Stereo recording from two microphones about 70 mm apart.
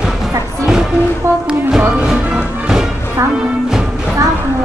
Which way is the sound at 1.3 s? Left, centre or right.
Right.